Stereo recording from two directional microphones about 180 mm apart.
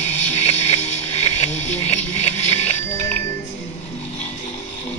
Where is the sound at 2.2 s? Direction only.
35° left (ahead or behind).